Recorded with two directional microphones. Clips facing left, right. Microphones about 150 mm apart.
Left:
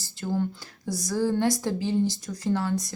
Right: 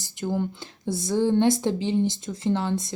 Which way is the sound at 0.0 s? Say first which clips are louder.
Right 1 dB; 15° right (ahead or behind).